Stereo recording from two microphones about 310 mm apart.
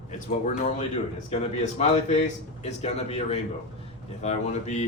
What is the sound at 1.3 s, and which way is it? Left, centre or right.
A man's voice, left.